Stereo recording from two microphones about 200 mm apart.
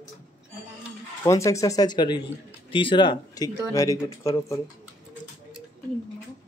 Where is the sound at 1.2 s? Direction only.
15° left (ahead or behind).